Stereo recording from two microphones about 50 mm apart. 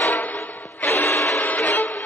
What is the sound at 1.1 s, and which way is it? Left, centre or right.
Music, left.